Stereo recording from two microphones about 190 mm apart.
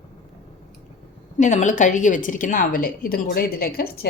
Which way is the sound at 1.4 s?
40° left (ahead or behind).